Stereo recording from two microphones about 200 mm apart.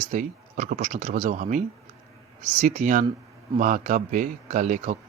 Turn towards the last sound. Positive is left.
turn(degrees=-40)  # may be behind; listen again after turning